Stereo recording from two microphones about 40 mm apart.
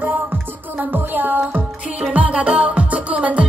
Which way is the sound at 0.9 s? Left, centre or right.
Right.